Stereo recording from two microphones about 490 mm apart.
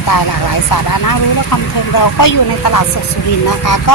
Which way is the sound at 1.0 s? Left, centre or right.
Left.